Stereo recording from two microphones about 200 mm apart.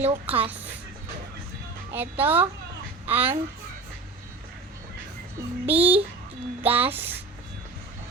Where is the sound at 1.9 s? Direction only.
10° right (ahead or behind).